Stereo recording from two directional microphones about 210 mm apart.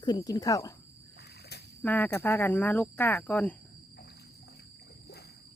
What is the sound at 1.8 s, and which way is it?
A woman's voice, 10° left (ahead or behind).